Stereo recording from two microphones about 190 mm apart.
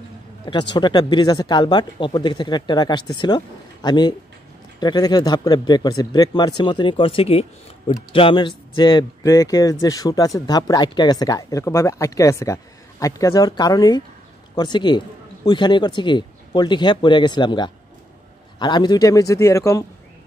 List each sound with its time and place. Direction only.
0.7 s a man's voice: 25° left (ahead or behind)